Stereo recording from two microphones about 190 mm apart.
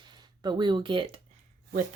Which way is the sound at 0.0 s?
25° right (ahead or behind).